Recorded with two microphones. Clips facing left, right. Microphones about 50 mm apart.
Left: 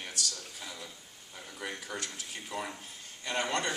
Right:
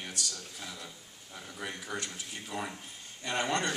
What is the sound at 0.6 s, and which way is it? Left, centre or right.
Speech, centre.